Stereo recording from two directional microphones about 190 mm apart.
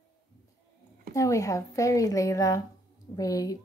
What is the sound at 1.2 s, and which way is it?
Speech, 15° left (ahead or behind).